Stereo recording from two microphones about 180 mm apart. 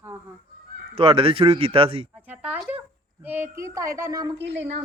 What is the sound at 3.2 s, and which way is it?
Speech, 10° right (ahead or behind).